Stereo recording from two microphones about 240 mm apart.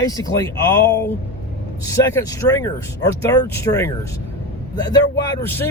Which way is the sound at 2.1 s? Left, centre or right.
Centre.